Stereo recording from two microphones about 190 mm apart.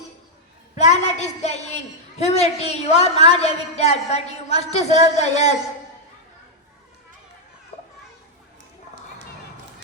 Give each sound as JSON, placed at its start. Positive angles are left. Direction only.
{"t": 0.9, "sound": "a man's voice", "side_deg": 35}